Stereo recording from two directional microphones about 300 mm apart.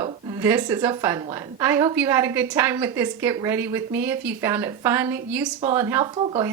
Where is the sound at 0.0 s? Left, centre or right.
Centre.